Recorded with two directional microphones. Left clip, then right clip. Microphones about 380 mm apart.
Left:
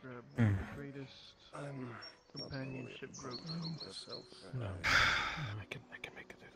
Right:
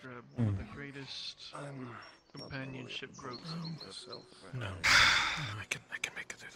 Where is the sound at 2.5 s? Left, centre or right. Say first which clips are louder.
Right 3 dB; right.